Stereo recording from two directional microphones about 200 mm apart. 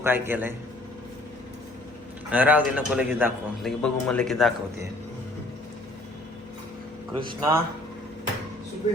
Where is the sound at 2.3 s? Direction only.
10° right (ahead or behind).